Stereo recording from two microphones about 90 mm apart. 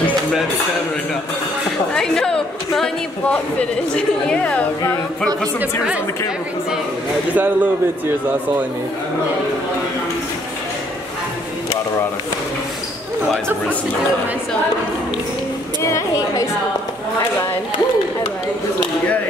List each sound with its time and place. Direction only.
2.0 s a woman's voice: 5° left (ahead or behind)
7.3 s speech: 20° right (ahead or behind)
15.8 s a woman's voice: 35° left (ahead or behind)